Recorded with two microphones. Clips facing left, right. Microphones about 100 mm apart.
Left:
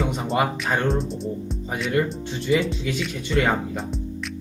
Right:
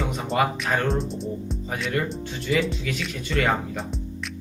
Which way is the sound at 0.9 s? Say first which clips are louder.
Left 2 dB; centre (ahead or behind).